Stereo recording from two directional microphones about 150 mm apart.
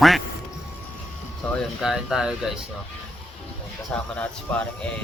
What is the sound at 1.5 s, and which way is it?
Speech, centre (ahead or behind).